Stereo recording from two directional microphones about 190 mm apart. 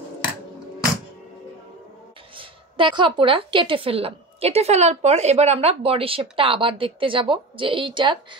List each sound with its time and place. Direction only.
2.3 s a woman's voice: 25° right (ahead or behind)